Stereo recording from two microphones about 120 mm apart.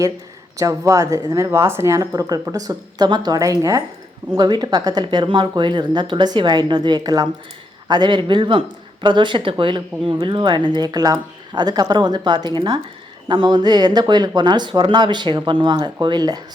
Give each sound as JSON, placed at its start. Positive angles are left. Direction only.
{"t": 0.5, "sound": "a woman's voice", "side_deg": -25}